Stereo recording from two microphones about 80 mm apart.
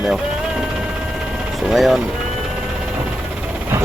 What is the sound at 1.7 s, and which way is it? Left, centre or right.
Speech, centre.